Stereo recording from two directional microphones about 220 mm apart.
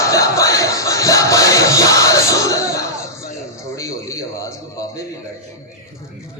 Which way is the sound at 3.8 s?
15° left (ahead or behind).